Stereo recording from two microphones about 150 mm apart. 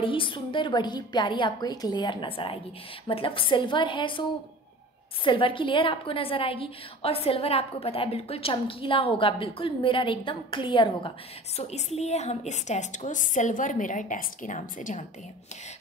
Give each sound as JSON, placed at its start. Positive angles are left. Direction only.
{"t": 0.0, "sound": "a woman's voice", "side_deg": 35}